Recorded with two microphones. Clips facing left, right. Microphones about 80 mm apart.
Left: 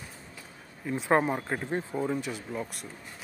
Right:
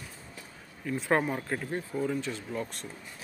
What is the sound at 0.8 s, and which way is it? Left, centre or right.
Speech, centre.